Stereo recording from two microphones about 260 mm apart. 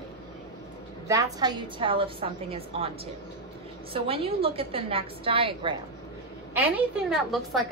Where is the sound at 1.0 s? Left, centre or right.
Centre.